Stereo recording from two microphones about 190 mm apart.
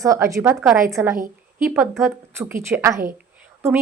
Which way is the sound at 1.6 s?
Centre (ahead or behind).